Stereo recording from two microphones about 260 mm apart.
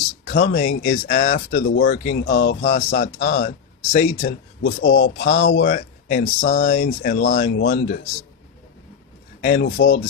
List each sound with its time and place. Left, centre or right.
0.3 s speech: left
9.4 s speech: left